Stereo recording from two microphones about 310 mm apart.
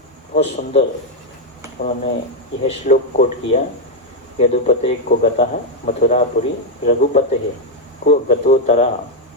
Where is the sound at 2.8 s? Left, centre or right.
Left.